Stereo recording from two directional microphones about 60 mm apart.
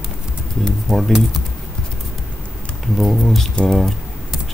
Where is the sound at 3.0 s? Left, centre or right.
Centre.